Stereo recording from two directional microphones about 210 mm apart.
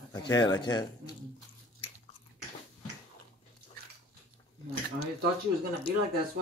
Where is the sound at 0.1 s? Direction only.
20° left (ahead or behind).